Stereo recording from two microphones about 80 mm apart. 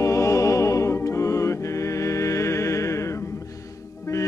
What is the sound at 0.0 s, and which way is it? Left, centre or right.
Music, left.